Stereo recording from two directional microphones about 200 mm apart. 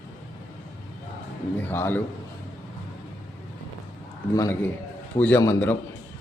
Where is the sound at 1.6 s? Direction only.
10° left (ahead or behind).